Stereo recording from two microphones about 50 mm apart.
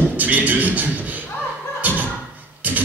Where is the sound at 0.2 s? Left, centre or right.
Right.